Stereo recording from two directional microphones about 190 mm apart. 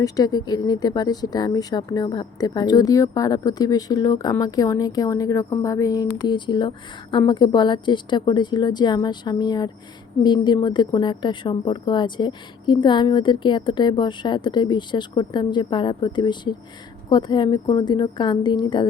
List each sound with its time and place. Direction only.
0.0 s speech: 20° left (ahead or behind)